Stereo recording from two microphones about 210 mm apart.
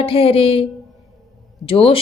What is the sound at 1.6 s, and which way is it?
Speech, 25° left (ahead or behind).